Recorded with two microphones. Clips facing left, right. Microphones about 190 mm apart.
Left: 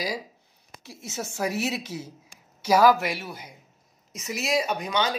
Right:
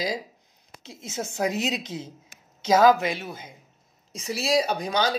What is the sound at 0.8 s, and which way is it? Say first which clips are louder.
A woman's voice: right 2 dB; 20° right (ahead or behind).